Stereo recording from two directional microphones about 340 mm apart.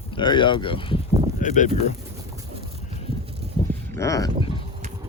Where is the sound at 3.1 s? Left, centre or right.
Centre.